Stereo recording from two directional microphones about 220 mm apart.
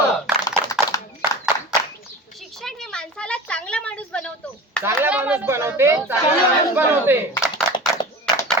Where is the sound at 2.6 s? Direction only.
Centre (ahead or behind).